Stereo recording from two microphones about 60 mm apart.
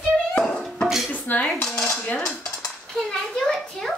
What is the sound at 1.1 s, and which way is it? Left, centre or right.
Dishes, left.